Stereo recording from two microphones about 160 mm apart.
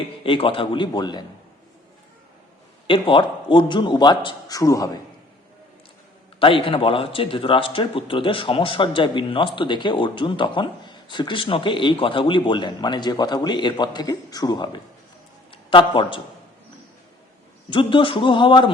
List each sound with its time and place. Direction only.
0.2 s a man's voice: 35° left (ahead or behind)
2.8 s a man's voice: 30° left (ahead or behind)
6.4 s a man's voice: 35° left (ahead or behind)
17.7 s a man's voice: 30° left (ahead or behind)